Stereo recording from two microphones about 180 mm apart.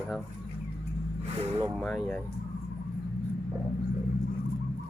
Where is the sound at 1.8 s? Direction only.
Centre (ahead or behind).